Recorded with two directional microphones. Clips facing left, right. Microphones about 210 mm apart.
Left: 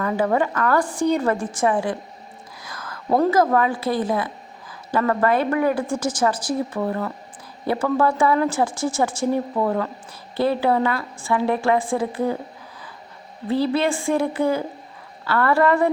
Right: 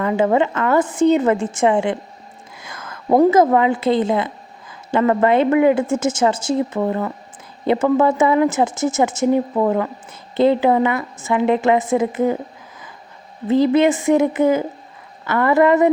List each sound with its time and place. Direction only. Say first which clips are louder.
0.0 s a woman's voice: right 4 dB; 20° right (ahead or behind)
13.5 s a woman's voice: right 6 dB; 20° right (ahead or behind)